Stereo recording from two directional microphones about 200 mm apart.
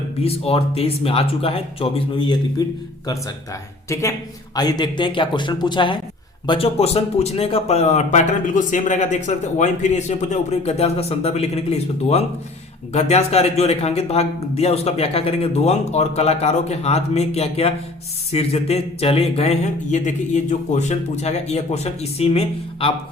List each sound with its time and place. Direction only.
0.2 s speech: 30° left (ahead or behind)
4.5 s speech: 20° left (ahead or behind)